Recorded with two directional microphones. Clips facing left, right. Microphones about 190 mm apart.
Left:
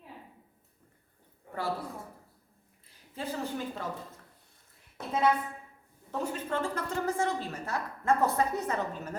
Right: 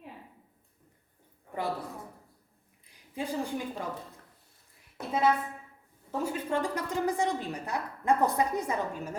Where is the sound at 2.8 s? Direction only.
15° right (ahead or behind).